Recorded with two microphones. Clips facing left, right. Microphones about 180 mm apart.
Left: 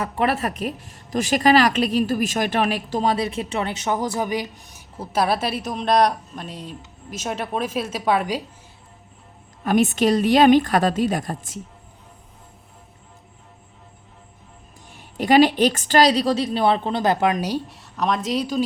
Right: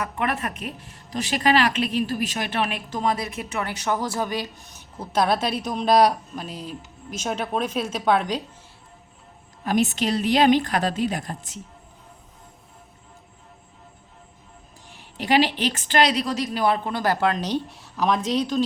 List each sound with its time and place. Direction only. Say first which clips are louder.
0.0 s a woman's voice: left 4 dB; 35° left (ahead or behind); by 8.4 s 5° left (ahead or behind)
9.7 s a woman's voice: left 5 dB; 50° left (ahead or behind)
14.9 s a woman's voice: left 5 dB; 45° left (ahead or behind); by 18.6 s 5° left (ahead or behind)